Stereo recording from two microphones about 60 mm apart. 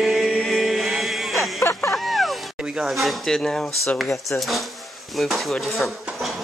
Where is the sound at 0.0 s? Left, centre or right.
Centre.